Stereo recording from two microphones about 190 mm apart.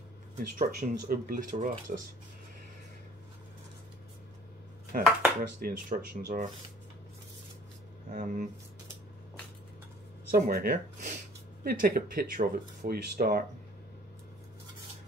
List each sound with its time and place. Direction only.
0.4 s speech: 50° right (ahead or behind)
4.9 s speech: 45° right (ahead or behind)
8.1 s speech: 40° right (ahead or behind)
10.3 s speech: 50° right (ahead or behind)